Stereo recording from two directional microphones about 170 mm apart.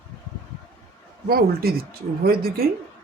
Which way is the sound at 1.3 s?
60° right (ahead or behind).